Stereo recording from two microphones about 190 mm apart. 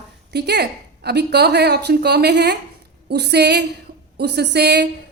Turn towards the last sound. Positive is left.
turn(degrees=-60)  # may be behind; listen again after turning